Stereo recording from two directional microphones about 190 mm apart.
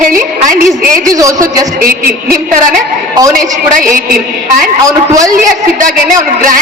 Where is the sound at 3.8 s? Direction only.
45° right (ahead or behind).